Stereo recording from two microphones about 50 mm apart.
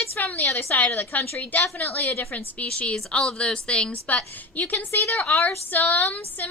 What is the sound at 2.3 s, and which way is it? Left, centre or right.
Speech, left.